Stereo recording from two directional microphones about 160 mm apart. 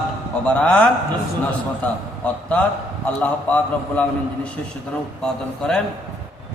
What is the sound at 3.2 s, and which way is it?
A man's voice, 10° left (ahead or behind).